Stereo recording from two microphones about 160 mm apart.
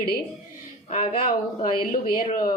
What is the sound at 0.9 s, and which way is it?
Speech, 45° left (ahead or behind).